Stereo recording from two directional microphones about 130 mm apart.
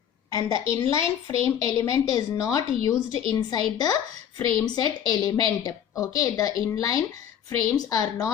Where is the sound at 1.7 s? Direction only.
25° left (ahead or behind).